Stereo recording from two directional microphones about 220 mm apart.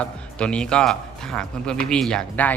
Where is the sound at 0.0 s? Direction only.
5° left (ahead or behind).